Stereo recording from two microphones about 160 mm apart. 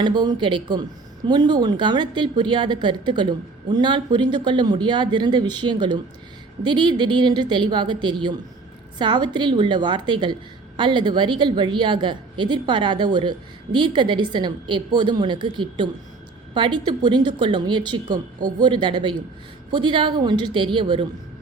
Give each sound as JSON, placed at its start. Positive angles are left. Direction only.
{"t": 0.0, "sound": "a woman's voice", "side_deg": -25}